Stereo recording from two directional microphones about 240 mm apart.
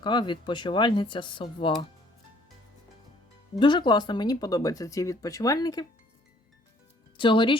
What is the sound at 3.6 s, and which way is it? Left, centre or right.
Speech, centre.